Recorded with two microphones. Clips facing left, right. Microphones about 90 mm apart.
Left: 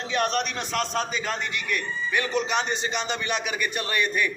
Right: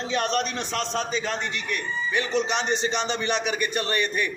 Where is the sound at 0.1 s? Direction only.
35° right (ahead or behind).